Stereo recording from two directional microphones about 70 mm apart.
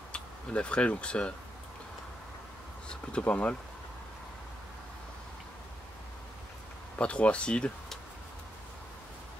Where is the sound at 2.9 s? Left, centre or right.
Centre.